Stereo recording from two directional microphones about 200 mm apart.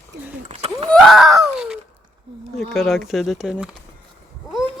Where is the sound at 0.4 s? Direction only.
30° right (ahead or behind).